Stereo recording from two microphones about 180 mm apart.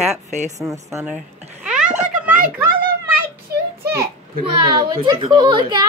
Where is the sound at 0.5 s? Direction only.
15° right (ahead or behind).